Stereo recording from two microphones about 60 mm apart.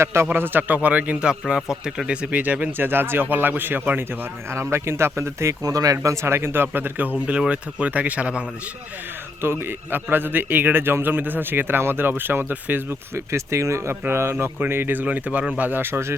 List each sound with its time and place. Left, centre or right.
0.0 s speech: right
0.3 s speech: right
4.5 s speech: right
5.6 s speech: right
7.3 s speech: centre
9.4 s a man's voice: right
13.1 s a man's voice: right
15.0 s a man's voice: right